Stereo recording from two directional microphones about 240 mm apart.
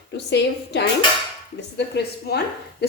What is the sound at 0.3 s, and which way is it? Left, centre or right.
A woman's voice, left.